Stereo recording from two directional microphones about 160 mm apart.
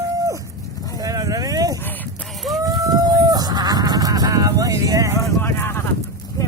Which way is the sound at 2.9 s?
25° right (ahead or behind).